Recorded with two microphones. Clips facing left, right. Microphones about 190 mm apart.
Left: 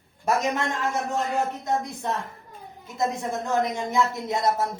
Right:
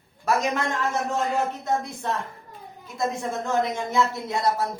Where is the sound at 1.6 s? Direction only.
15° left (ahead or behind).